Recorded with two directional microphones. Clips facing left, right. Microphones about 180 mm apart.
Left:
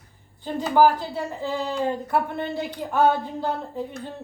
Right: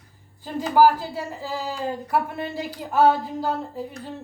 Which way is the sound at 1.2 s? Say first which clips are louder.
Left 3 dB; centre (ahead or behind).